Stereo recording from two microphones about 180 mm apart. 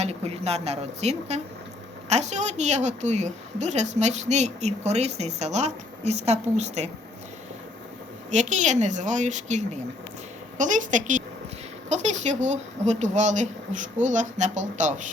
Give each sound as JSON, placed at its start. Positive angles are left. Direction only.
{"t": 0.0, "sound": "a woman's voice", "side_deg": -35}
{"t": 8.3, "sound": "a woman's voice", "side_deg": -40}